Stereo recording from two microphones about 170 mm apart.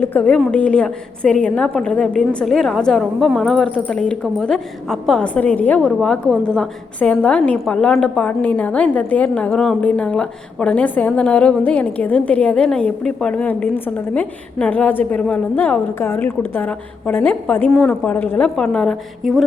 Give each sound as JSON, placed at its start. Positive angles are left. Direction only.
{"t": 0.0, "sound": "a woman's voice", "side_deg": 10}